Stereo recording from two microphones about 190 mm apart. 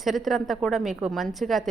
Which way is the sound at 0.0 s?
Centre (ahead or behind).